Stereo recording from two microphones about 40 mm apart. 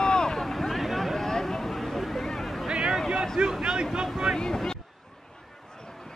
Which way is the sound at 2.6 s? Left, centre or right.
Right.